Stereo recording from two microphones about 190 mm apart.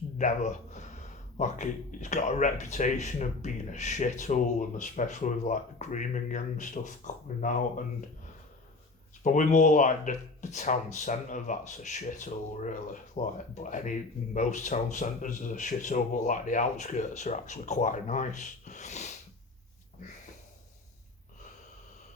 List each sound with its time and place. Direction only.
0.2 s speech: 40° left (ahead or behind)
9.2 s speech: 40° left (ahead or behind)